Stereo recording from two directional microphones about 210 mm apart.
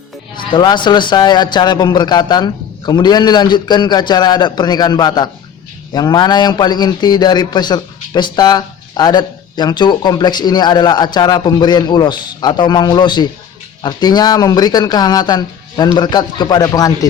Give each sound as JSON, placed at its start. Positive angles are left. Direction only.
{"t": 0.3, "sound": "a man's voice", "side_deg": 20}